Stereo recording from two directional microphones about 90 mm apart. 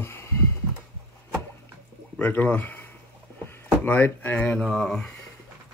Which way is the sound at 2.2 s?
20° left (ahead or behind).